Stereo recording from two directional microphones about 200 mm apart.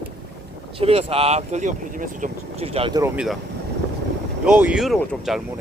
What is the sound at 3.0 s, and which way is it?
Speech, 5° right (ahead or behind).